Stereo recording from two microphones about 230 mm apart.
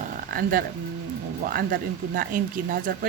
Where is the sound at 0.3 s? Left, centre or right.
Right.